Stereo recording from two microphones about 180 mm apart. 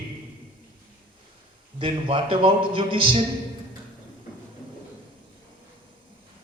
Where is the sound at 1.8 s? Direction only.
30° right (ahead or behind).